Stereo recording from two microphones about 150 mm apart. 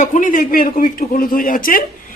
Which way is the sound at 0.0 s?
60° left (ahead or behind).